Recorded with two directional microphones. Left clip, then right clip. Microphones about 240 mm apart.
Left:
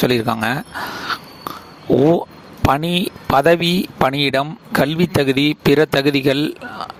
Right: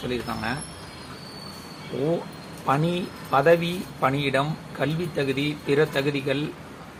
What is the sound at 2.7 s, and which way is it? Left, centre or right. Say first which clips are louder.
Speech: left 7 dB; left.